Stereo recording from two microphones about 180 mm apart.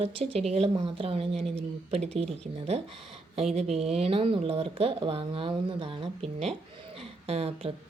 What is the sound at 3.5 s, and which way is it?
A woman's voice, 35° right (ahead or behind).